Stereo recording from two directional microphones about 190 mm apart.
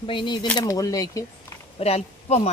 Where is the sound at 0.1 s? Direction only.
25° left (ahead or behind).